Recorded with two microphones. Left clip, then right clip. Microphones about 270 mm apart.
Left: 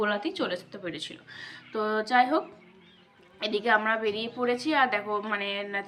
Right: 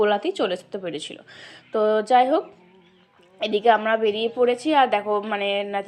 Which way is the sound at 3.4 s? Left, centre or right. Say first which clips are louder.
Right 6 dB; centre.